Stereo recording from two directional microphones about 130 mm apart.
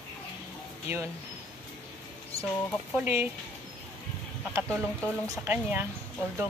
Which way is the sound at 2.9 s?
15° right (ahead or behind).